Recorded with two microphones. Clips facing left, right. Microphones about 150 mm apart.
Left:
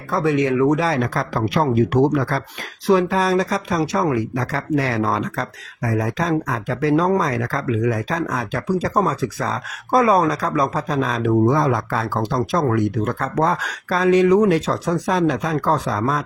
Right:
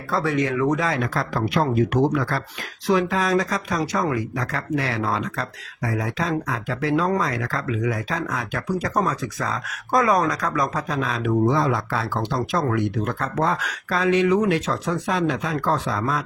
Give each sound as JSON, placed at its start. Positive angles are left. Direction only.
{"t": 0.1, "sound": "speech", "side_deg": 20}
{"t": 0.9, "sound": "speech", "side_deg": 35}